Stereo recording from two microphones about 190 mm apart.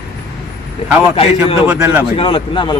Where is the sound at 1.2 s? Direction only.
30° left (ahead or behind).